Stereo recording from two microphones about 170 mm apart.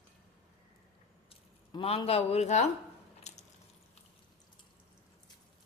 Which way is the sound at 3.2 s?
40° left (ahead or behind).